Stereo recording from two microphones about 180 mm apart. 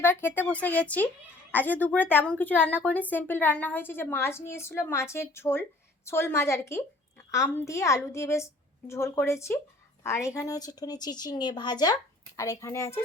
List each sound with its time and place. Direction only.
0.0 s a woman's voice: 10° left (ahead or behind)